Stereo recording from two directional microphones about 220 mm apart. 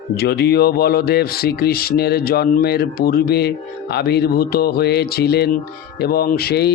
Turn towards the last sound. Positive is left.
turn(degrees=45)  # may be behind; listen again after turning